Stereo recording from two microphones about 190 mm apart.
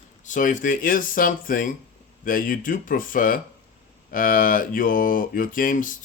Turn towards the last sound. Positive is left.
turn(degrees=45)  # may be behind; listen again after turning